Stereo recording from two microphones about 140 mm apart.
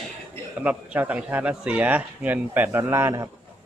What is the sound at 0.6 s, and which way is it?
Speech, 10° right (ahead or behind).